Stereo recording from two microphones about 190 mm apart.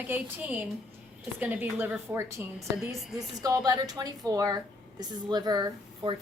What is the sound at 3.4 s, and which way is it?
A woman's voice, 20° right (ahead or behind).